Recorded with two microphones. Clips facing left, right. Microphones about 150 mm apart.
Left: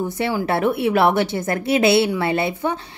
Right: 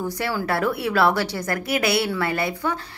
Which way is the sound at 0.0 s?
20° left (ahead or behind).